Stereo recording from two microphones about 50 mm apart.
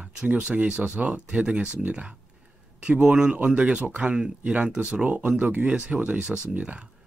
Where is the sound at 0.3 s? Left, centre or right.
Right.